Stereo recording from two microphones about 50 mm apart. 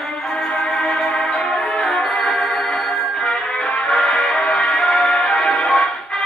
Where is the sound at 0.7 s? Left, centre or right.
Centre.